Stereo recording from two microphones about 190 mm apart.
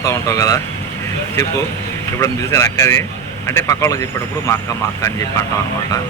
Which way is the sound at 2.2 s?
15° left (ahead or behind).